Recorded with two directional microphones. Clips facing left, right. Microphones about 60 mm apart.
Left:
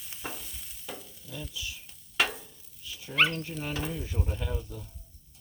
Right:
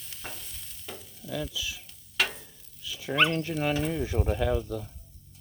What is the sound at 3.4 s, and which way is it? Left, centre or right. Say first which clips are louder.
Speech: right 8 dB; right.